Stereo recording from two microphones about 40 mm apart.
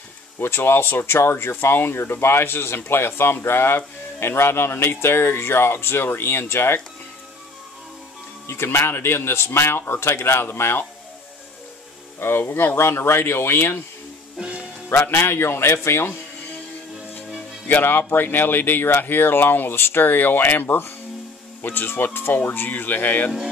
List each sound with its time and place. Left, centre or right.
0.7 s speech: left
8.5 s speech: left
12.2 s speech: left
12.7 s speech: left
14.9 s speech: left
17.8 s speech: left